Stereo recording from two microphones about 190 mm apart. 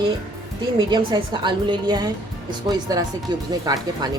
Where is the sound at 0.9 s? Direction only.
25° right (ahead or behind).